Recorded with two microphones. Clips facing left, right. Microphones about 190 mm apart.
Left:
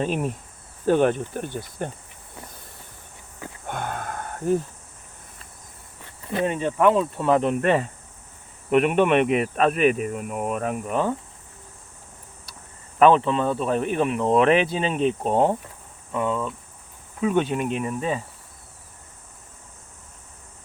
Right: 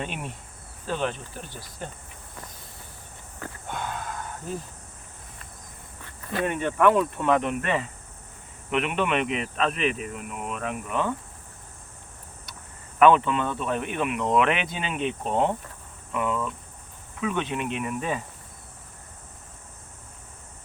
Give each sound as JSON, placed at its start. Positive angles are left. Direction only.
{"t": 0.0, "sound": "speech", "side_deg": 40}
{"t": 0.9, "sound": "speech", "side_deg": 50}
{"t": 3.7, "sound": "a sound", "side_deg": 55}
{"t": 6.2, "sound": "speech", "side_deg": 25}
{"t": 13.0, "sound": "speech", "side_deg": 30}
{"t": 17.2, "sound": "speech", "side_deg": 40}